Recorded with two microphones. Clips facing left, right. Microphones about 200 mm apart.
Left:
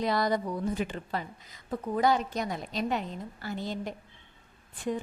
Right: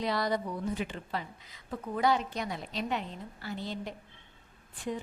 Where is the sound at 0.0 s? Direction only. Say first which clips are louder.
Left 3 dB; 45° left (ahead or behind).